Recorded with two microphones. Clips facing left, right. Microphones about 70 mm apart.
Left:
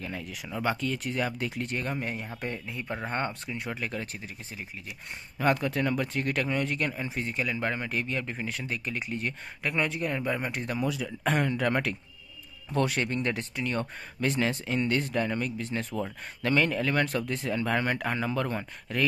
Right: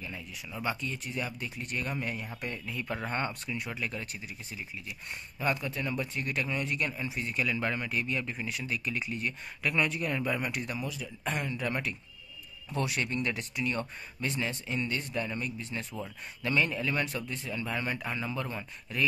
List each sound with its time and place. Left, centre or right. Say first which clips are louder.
0.0 s speech: left 5 dB; left
0.7 s speech: left 6 dB; left
1.7 s speech: left 2 dB; left
5.4 s speech: left 6 dB; left
11.1 s speech: left 6 dB; left
12.7 s speech: left 4 dB; left
14.2 s speech: left 6 dB; left
15.7 s speech: left 6 dB; left